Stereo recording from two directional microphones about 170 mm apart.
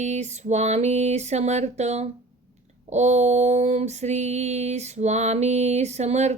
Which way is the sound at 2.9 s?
40° right (ahead or behind).